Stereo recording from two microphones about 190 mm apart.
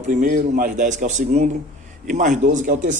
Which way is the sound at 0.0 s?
40° right (ahead or behind).